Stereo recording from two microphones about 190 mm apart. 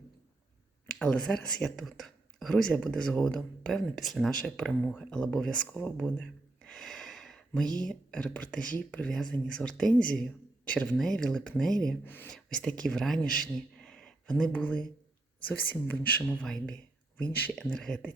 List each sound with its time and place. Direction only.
0.9 s speech: 5° left (ahead or behind)